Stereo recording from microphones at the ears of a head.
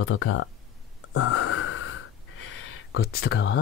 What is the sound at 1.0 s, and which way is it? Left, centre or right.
Gasp, left.